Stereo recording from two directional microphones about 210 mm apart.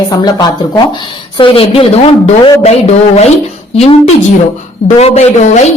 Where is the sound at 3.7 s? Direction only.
30° left (ahead or behind).